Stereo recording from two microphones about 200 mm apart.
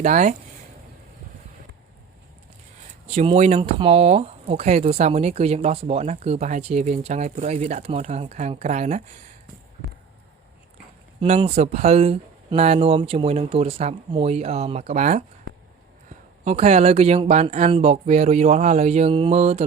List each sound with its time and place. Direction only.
0.0 s speech: 35° right (ahead or behind)
3.1 s speech: 30° right (ahead or behind)
11.2 s speech: 30° right (ahead or behind)